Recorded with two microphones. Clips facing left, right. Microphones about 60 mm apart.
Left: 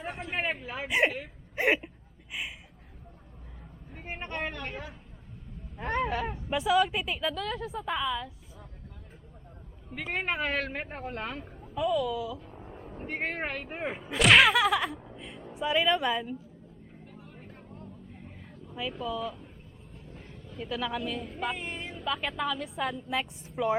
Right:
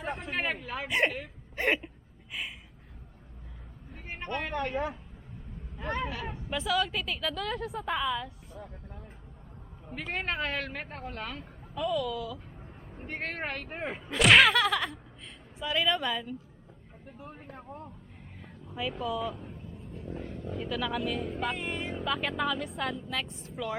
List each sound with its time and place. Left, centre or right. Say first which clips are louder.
0.0 s speech: even; centre
2.3 s a sound: left 1 dB; centre
3.9 s vehicle: right 1 dB; left
5.8 s speech: left 4 dB; left
6.5 s speech: left 4 dB; centre
7.3 s speech: even; centre
9.9 s speech: left 2 dB; centre
11.7 s speech: left 2 dB; centre
17.2 s vehicle: right 7 dB; right
18.1 s a sound: left 2 dB; centre
20.3 s roaring cats: right 10 dB; right
20.6 s speech: even; centre
23.0 s speech: left 3 dB; centre